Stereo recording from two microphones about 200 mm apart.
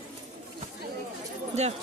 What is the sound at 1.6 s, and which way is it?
Speech, 35° right (ahead or behind).